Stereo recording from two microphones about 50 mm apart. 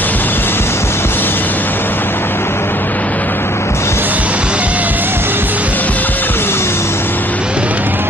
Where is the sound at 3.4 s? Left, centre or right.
Left.